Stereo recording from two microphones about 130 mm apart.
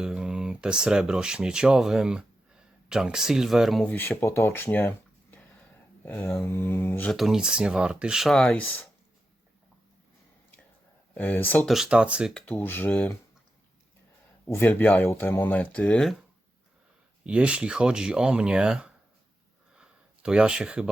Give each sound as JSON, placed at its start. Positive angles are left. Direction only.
{"t": 0.0, "sound": "speech", "side_deg": -5}
{"t": 3.8, "sound": "speech", "side_deg": 15}
{"t": 7.1, "sound": "speech", "side_deg": 0}
{"t": 11.1, "sound": "speech", "side_deg": 10}
{"t": 11.7, "sound": "speech", "side_deg": -5}
{"t": 12.3, "sound": "speech", "side_deg": 10}
{"t": 14.4, "sound": "speech", "side_deg": 15}
{"t": 17.2, "sound": "speech", "side_deg": -10}
{"t": 19.7, "sound": "a sound", "side_deg": -5}